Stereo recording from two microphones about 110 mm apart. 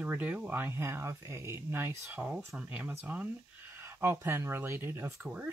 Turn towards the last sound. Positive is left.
turn(degrees=-10)  # may be behind; listen again after turning